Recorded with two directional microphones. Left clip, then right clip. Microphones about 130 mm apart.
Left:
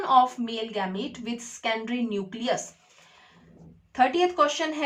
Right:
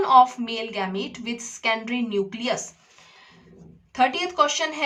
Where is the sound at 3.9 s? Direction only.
25° right (ahead or behind).